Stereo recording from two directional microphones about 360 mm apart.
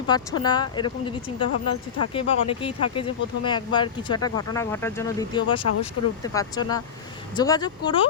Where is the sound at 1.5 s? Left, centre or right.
Left.